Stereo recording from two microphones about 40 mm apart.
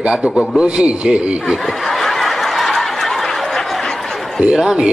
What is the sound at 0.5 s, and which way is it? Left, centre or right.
Speech, right.